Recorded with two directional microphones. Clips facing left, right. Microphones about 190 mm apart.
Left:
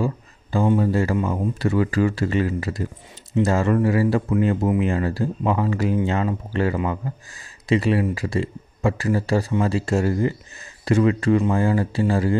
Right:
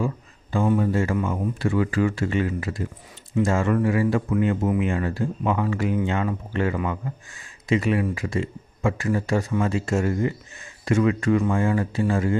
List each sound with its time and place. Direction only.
0.0 s speech: 35° left (ahead or behind)